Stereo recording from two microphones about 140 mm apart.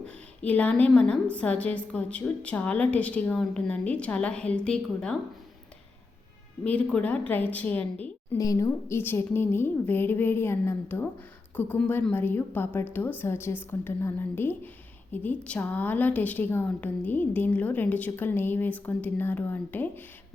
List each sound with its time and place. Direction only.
0.0 s a woman's voice: 10° left (ahead or behind)
6.7 s a woman's voice: 10° left (ahead or behind)
8.4 s a woman's voice: 25° left (ahead or behind)